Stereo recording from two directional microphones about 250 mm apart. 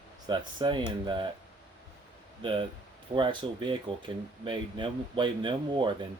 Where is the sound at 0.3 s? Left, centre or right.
Centre.